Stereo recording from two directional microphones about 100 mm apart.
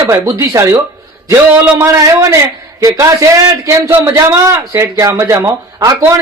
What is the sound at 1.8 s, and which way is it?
Speech, 30° right (ahead or behind).